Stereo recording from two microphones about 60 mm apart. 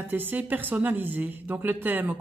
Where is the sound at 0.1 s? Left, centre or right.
Right.